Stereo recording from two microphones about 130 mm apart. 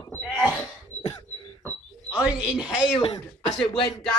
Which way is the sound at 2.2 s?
10° right (ahead or behind).